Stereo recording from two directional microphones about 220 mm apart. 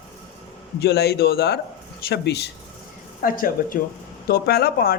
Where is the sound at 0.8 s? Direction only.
50° left (ahead or behind).